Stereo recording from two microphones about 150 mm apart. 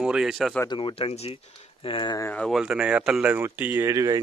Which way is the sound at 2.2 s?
15° left (ahead or behind).